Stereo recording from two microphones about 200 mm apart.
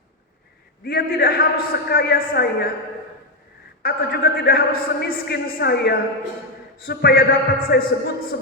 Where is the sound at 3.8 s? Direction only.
50° left (ahead or behind).